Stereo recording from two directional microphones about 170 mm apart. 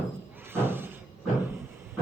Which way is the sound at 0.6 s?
15° right (ahead or behind).